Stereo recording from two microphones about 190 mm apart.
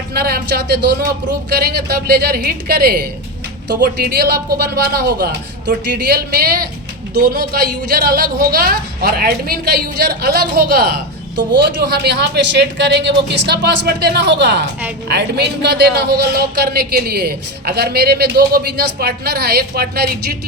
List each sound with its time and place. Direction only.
0.1 s a man's voice: 55° right (ahead or behind)